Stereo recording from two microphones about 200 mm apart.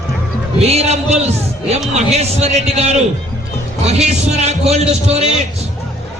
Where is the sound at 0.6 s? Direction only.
30° right (ahead or behind).